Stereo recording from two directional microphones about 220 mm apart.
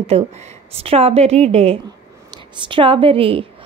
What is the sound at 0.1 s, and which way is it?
A woman's voice, 30° right (ahead or behind).